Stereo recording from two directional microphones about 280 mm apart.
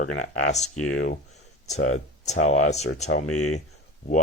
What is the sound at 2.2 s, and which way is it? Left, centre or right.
Speech, left.